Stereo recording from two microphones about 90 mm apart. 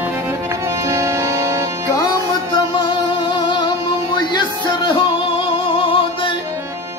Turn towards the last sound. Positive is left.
turn(degrees=75)  # may be behind; listen again after turning